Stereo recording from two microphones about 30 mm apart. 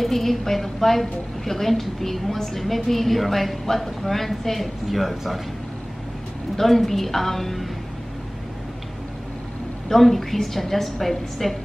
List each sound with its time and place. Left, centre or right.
0.0 s a woman's voice: centre
2.3 s a woman's voice: centre
6.6 s a woman's voice: centre
9.8 s a woman's voice: centre